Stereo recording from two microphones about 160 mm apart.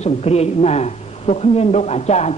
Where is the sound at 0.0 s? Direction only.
40° left (ahead or behind).